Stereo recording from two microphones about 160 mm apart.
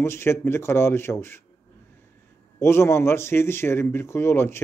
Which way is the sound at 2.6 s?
15° left (ahead or behind).